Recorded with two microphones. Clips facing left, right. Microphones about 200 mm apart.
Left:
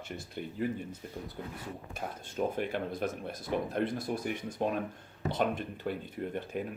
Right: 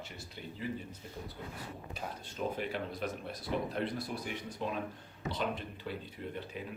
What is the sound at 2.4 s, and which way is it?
Speech, 50° left (ahead or behind).